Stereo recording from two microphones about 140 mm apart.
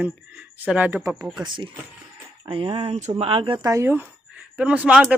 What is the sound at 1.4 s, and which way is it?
Speech, 35° right (ahead or behind).